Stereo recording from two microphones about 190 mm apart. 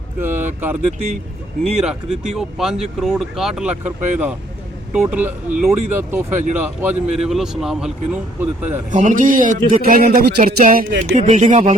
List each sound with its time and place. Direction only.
0.2 s speech: 10° right (ahead or behind)
1.8 s speech: 5° right (ahead or behind)
8.9 s a man's voice: 40° right (ahead or behind)